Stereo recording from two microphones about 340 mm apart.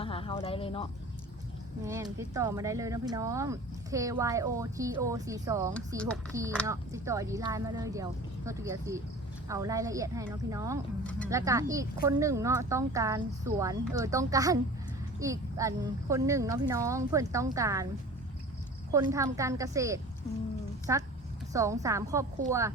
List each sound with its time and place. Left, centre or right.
0.0 s a sound: centre
1.8 s speech: centre
18.9 s speech: centre